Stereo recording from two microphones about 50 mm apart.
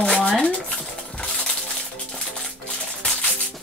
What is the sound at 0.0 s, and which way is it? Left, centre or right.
Stir, centre.